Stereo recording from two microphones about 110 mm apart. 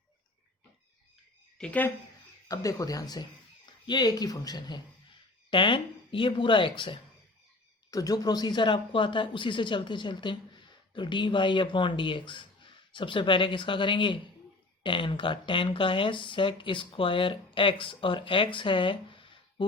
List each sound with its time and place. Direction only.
1.5 s a woman's voice: 10° left (ahead or behind)
2.5 s speech: 30° left (ahead or behind)
5.5 s speech: 50° left (ahead or behind)
7.9 s speech: 30° left (ahead or behind); by 19.6 s 50° left (ahead or behind)